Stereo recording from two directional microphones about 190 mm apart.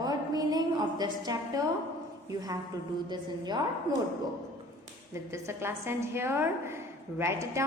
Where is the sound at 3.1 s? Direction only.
20° right (ahead or behind).